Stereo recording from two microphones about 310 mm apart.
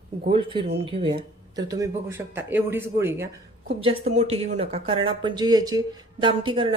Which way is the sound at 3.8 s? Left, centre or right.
Right.